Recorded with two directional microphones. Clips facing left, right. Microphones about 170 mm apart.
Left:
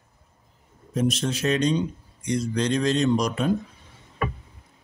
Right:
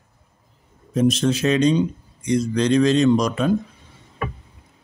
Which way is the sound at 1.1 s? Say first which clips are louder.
Right 6 dB; 90° right.